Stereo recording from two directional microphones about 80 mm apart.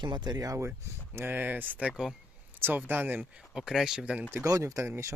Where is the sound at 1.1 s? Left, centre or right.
Right.